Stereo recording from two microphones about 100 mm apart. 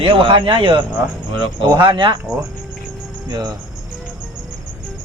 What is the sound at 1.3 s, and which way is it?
Speech, 45° right (ahead or behind).